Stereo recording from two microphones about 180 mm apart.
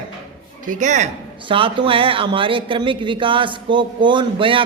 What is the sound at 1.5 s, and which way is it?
Speech, 30° right (ahead or behind).